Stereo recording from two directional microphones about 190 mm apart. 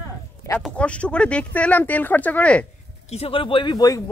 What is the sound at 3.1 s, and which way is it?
Speech, 30° left (ahead or behind).